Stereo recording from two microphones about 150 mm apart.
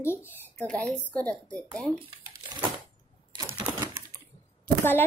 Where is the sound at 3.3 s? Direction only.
30° right (ahead or behind).